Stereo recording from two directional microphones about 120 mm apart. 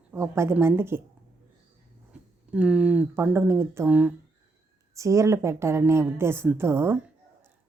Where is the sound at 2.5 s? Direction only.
10° right (ahead or behind).